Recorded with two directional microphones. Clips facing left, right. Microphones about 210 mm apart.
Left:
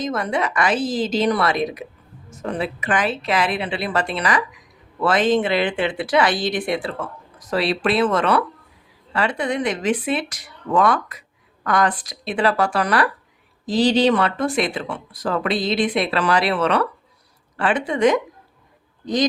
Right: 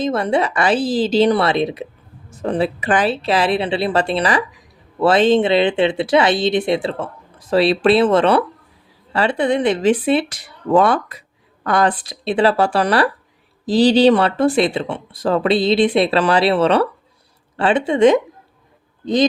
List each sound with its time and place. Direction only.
0.0 s a woman's voice: 30° right (ahead or behind)